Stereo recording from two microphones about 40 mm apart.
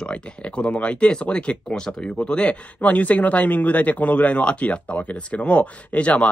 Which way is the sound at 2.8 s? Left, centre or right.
Left.